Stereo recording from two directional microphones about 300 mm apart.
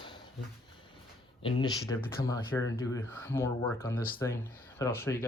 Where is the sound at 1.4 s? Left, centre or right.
Centre.